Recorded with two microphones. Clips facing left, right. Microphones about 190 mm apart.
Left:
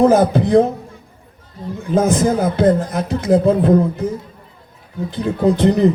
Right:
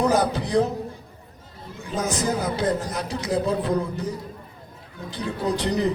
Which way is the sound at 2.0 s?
55° left (ahead or behind).